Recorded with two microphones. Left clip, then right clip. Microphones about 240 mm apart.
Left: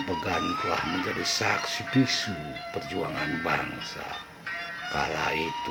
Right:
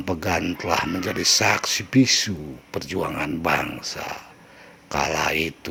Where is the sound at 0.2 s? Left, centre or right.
Right.